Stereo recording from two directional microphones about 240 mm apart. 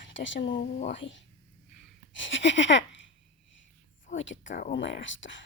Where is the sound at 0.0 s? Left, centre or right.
Left.